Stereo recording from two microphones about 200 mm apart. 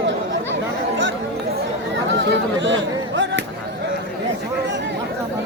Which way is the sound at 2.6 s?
65° right (ahead or behind).